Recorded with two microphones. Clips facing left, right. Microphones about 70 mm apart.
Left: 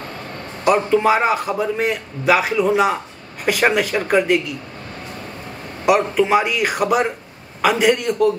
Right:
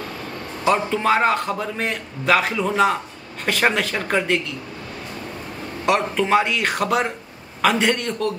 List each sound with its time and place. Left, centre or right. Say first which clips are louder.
0.7 s a man's voice: left 4 dB; centre
5.9 s a man's voice: left 3 dB; centre